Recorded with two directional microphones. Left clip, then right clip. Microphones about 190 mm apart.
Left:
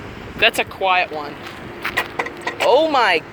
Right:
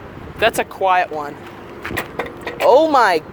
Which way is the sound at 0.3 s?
25° right (ahead or behind).